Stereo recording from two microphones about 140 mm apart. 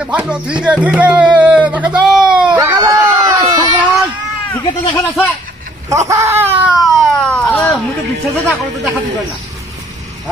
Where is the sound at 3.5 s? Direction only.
30° right (ahead or behind).